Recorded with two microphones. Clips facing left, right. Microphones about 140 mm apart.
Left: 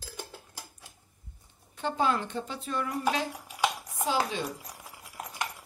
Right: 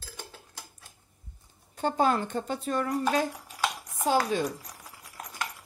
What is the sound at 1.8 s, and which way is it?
A woman's voice, 45° right (ahead or behind).